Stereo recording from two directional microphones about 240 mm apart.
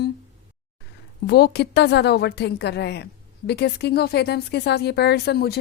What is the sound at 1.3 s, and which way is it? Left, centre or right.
A woman's voice, left.